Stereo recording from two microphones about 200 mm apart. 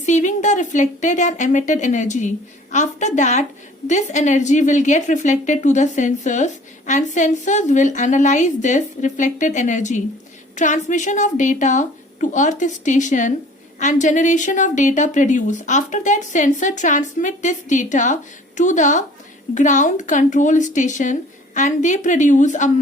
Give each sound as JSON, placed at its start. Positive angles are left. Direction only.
{"t": 0.0, "sound": "a woman's voice", "side_deg": 40}